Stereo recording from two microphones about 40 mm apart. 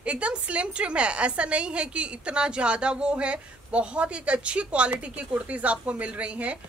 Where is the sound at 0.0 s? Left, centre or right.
Right.